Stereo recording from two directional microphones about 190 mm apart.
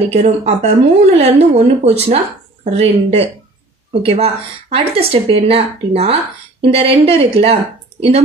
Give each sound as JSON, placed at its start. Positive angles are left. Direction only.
{"t": 0.1, "sound": "speech", "side_deg": -35}